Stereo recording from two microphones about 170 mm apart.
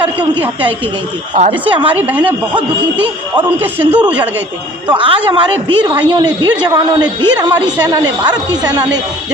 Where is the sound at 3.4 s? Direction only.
10° right (ahead or behind).